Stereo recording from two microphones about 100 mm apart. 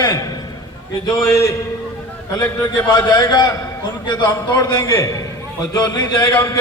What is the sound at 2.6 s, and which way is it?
A man's voice, 40° left (ahead or behind).